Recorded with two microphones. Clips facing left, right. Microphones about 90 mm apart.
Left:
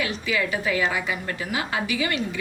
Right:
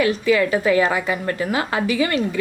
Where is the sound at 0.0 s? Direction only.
40° right (ahead or behind).